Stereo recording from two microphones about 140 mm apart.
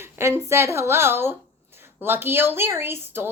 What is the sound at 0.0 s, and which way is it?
Speech, 20° right (ahead or behind).